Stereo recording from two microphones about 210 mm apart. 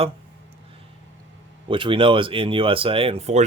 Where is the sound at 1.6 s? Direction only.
25° right (ahead or behind).